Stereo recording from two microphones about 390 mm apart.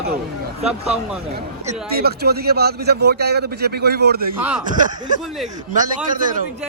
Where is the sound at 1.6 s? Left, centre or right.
Right.